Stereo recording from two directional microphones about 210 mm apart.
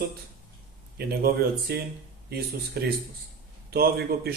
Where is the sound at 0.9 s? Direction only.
50° right (ahead or behind).